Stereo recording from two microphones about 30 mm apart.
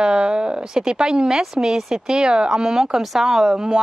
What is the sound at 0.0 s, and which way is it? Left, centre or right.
A woman's voice, right.